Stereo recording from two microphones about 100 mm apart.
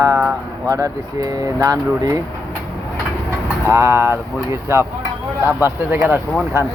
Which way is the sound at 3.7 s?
25° right (ahead or behind).